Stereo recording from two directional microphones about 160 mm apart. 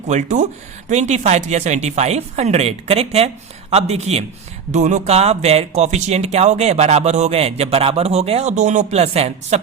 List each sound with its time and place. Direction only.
0.1 s a man's voice: 50° right (ahead or behind)